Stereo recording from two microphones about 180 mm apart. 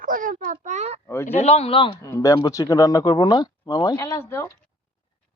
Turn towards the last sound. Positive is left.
turn(degrees=15)  # may be behind; listen again after turning